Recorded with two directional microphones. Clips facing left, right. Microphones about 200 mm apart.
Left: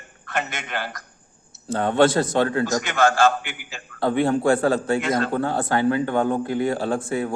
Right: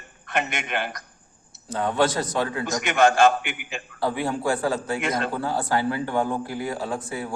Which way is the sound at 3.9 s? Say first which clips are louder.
Left 6 dB; 25° left (ahead or behind).